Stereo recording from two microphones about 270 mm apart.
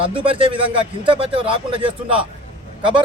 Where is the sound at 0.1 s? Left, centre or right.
Centre.